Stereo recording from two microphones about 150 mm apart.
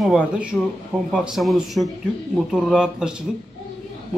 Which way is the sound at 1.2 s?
Centre (ahead or behind).